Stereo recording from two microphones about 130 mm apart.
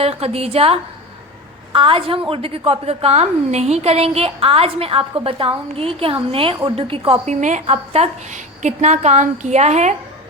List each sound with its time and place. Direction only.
0.0 s a woman's voice: 50° right (ahead or behind)
7.3 s a woman's voice: 65° right (ahead or behind)